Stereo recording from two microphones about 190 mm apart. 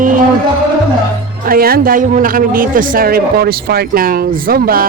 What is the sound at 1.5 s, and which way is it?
Speech, 50° right (ahead or behind).